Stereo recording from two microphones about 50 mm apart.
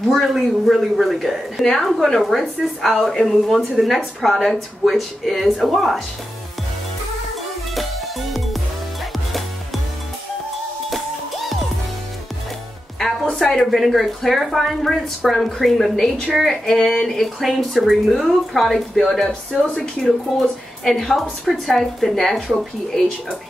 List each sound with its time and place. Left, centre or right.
0.2 s a woman's voice: centre
7.7 s music: centre
10.9 s music: centre
13.4 s speech: centre
13.7 s a woman's voice: centre
17.4 s a woman's voice: centre
19.2 s speech: left
19.8 s a woman's voice: centre